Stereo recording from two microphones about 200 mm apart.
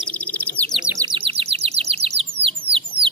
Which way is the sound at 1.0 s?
25° right (ahead or behind).